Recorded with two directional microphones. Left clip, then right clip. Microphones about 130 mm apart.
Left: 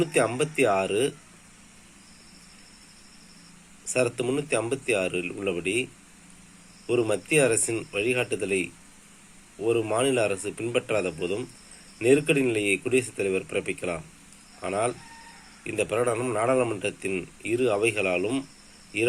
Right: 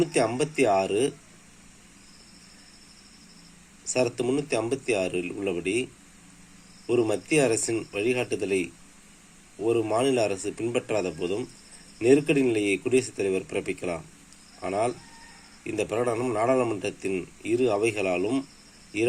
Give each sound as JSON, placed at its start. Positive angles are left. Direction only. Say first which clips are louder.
{"t": 0.0, "sound": "a man's voice", "louder": "even", "side_deg": -5}
{"t": 3.8, "sound": "a man's voice", "louder": "even", "side_deg": 0}